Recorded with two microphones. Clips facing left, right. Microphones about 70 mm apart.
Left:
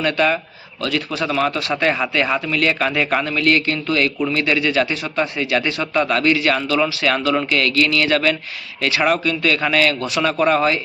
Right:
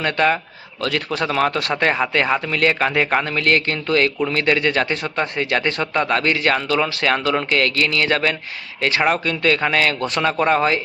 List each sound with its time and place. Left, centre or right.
0.0 s speech: right
6.8 s speech: right
7.1 s speech: right